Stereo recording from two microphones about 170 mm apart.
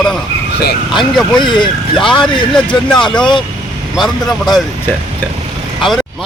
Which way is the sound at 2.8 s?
5° left (ahead or behind).